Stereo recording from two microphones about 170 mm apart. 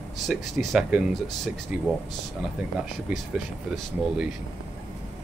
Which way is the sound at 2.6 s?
10° right (ahead or behind).